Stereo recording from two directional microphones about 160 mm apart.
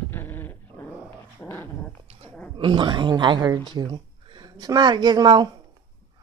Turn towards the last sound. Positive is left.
turn(degrees=-25)  # may be behind; listen again after turning